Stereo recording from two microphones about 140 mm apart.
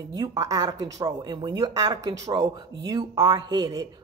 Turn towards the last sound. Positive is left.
turn(degrees=-25)  # may be behind; listen again after turning